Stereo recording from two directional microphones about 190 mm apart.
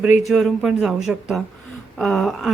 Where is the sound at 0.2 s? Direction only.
Centre (ahead or behind).